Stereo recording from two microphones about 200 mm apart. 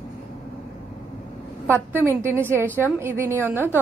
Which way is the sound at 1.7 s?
10° right (ahead or behind).